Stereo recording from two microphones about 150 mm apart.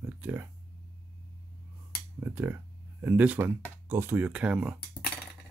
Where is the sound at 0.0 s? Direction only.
15° right (ahead or behind).